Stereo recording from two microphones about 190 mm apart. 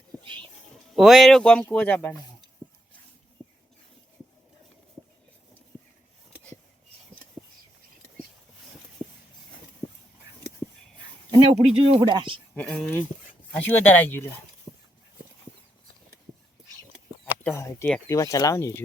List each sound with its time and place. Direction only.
0.2 s music: 25° right (ahead or behind)
0.9 s speech: centre (ahead or behind)
9.8 s a sound: 15° left (ahead or behind)
11.3 s speech: 25° right (ahead or behind)
12.5 s speech: 5° left (ahead or behind)
17.4 s speech: 15° left (ahead or behind)